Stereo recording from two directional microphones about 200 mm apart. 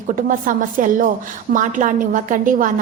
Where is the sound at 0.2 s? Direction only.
40° right (ahead or behind).